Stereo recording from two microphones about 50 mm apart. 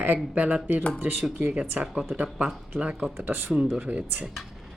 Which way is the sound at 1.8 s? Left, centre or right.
Right.